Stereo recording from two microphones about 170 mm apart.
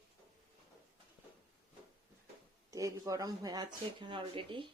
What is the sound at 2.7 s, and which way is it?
Speech, 20° right (ahead or behind).